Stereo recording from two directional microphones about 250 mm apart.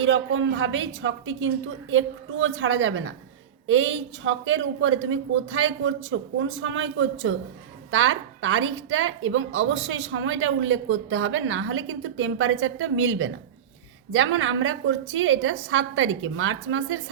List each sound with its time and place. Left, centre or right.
0.0 s a woman's voice: right